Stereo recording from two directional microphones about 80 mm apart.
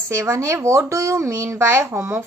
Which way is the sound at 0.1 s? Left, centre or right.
Right.